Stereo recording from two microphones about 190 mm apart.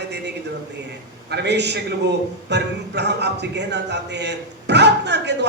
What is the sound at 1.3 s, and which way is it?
Speech, 65° right (ahead or behind).